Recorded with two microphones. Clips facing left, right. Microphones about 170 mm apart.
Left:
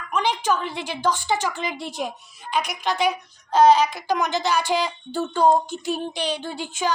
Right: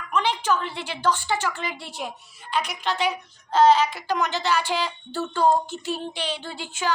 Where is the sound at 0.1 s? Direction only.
15° left (ahead or behind).